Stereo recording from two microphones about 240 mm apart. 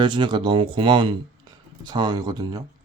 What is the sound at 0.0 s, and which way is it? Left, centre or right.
Speech, centre.